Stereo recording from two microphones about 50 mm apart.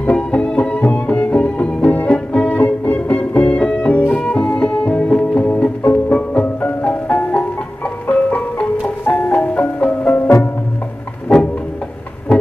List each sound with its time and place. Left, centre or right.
0.3 s music: left
2.6 s music: left
6.1 s music: left
9.5 s music: left
10.1 s music: left